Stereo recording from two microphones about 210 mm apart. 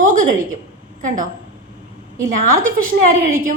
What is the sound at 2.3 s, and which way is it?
Speech, 40° right (ahead or behind).